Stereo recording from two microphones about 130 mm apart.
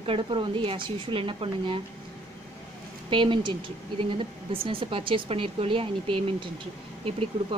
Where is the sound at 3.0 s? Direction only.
40° right (ahead or behind).